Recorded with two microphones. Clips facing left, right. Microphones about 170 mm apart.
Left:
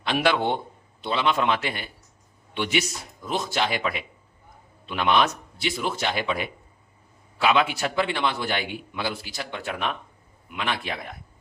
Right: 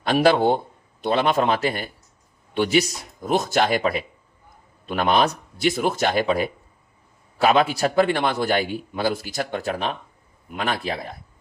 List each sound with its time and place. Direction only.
0.0 s a man's voice: 40° right (ahead or behind)